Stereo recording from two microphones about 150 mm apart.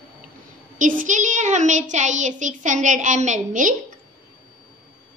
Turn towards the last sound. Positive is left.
turn(degrees=-55)  # may be behind; listen again after turning